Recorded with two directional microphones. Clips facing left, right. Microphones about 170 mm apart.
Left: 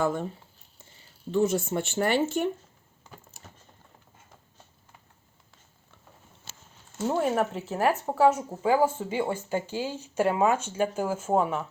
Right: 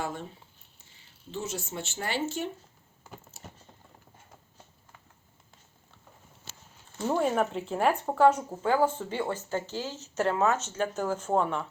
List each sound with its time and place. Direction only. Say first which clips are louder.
1.3 s speech: left 11 dB; 55° left (ahead or behind)
7.0 s speech: left 1 dB; 5° left (ahead or behind)